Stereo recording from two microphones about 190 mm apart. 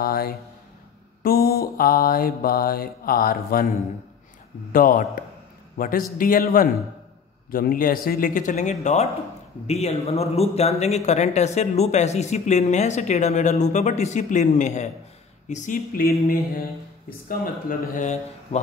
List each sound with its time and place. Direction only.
0.0 s mantra: 50° left (ahead or behind)
4.7 s mantra: 45° left (ahead or behind)
9.7 s speech: 35° left (ahead or behind)
15.4 s mantra: 40° left (ahead or behind)
17.3 s speech: 45° left (ahead or behind)